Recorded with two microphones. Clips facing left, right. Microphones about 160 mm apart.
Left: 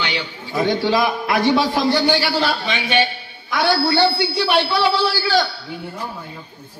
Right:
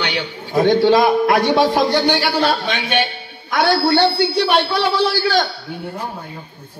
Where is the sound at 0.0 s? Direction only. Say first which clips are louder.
Right 2 dB; 45° right (ahead or behind).